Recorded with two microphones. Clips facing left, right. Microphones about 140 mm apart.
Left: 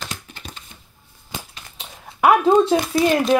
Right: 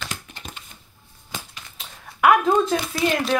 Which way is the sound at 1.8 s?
30° left (ahead or behind).